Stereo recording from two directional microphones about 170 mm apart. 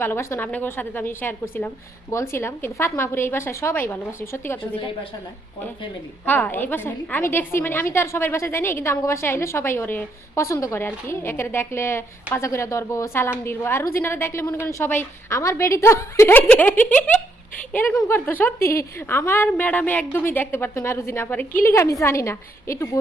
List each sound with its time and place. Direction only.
0.0 s a woman's voice: 15° left (ahead or behind)
6.2 s a woman's voice: 10° left (ahead or behind)